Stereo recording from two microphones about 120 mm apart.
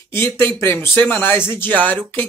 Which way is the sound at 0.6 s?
20° left (ahead or behind).